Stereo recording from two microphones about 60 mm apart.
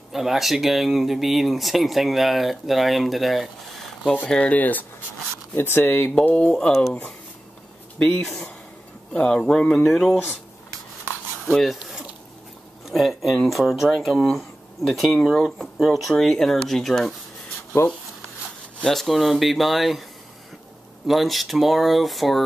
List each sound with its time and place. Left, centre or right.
0.1 s speech: centre
4.0 s speech: centre; by 6.1 s left
6.2 s speech: centre
8.2 s speech: centre
9.1 s speech: centre
9.4 s speech: centre
11.4 s speech: centre
12.8 s speech: centre
18.9 s speech: centre
21.1 s speech: centre